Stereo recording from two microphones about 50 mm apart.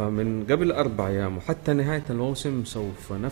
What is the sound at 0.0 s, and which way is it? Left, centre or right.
A man's voice, centre.